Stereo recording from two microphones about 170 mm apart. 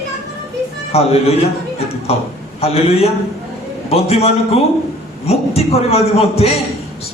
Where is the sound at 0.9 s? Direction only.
35° left (ahead or behind).